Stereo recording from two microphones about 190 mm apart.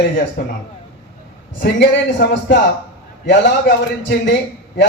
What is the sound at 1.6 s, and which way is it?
A man's voice, 65° left (ahead or behind).